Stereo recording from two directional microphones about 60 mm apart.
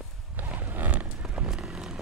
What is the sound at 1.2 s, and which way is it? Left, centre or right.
Vehicle, centre.